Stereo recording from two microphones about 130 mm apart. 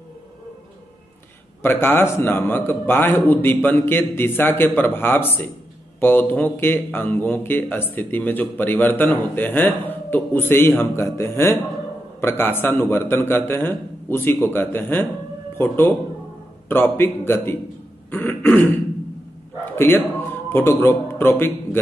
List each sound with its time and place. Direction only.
1.6 s speech: 15° left (ahead or behind)
18.1 s throat clearing: 15° left (ahead or behind)
19.7 s a man's voice: 15° left (ahead or behind)